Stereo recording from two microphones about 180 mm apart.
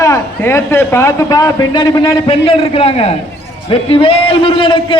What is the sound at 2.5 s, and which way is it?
A man's voice, 35° left (ahead or behind).